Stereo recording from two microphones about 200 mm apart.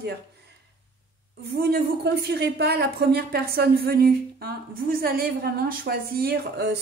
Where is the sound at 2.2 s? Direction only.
55° right (ahead or behind).